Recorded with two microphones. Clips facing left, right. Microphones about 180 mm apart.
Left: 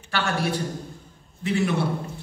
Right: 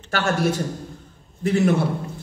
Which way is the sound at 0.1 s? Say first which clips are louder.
Right 4 dB; 45° right (ahead or behind).